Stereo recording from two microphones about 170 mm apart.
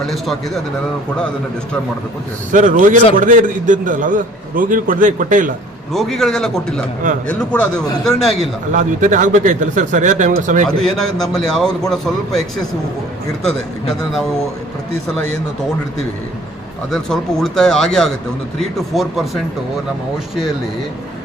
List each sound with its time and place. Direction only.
0.0 s a man's voice: centre (ahead or behind)
2.5 s a man's voice: 50° right (ahead or behind)
5.9 s a man's voice: centre (ahead or behind)
8.7 s a man's voice: 45° right (ahead or behind)
10.8 s a man's voice: centre (ahead or behind)
16.9 s a man's voice: 5° left (ahead or behind)